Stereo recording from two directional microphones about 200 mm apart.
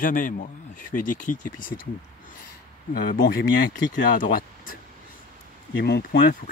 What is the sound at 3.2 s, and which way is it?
Speech, 55° left (ahead or behind).